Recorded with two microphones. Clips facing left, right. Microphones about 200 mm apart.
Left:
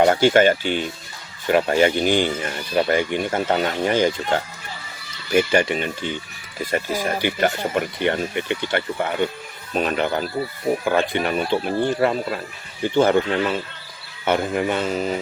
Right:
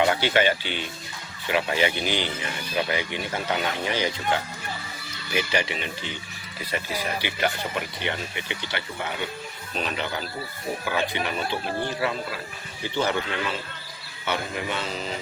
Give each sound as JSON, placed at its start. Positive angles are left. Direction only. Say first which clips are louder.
{"t": 0.0, "sound": "speech", "louder": "left 7 dB", "side_deg": 45}